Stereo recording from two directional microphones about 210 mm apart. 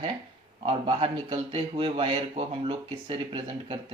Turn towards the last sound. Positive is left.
turn(degrees=-25)  # may be behind; listen again after turning